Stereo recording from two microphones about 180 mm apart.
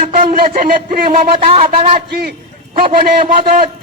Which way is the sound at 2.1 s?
55° right (ahead or behind).